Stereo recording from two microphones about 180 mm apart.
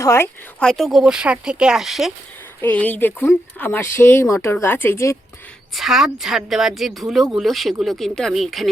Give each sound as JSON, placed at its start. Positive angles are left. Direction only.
{"t": 0.0, "sound": "speech", "side_deg": 15}
{"t": 0.6, "sound": "speech", "side_deg": 0}
{"t": 2.6, "sound": "speech", "side_deg": 10}
{"t": 5.7, "sound": "speech", "side_deg": 0}